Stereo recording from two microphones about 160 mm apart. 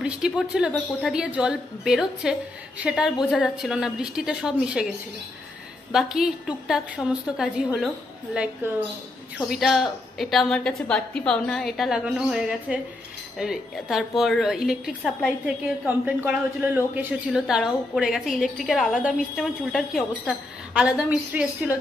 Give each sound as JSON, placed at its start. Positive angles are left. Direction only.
{"t": 0.0, "sound": "a woman's voice", "side_deg": -5}
{"t": 5.9, "sound": "a woman's voice", "side_deg": -5}
{"t": 9.4, "sound": "a woman's voice", "side_deg": 0}